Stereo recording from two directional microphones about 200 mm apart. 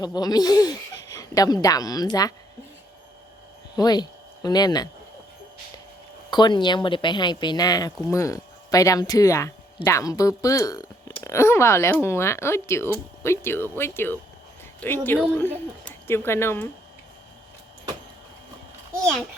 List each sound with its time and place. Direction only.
0.0 s speech: 20° left (ahead or behind)
3.8 s speech: 20° left (ahead or behind)
6.3 s speech: 20° left (ahead or behind)